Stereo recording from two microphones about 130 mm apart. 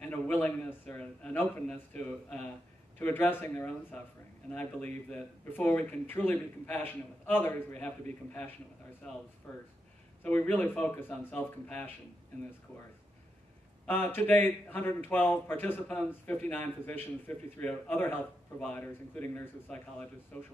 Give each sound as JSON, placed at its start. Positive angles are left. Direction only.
{"t": 0.0, "sound": "a man's voice", "side_deg": 15}
{"t": 13.8, "sound": "a man's voice", "side_deg": 15}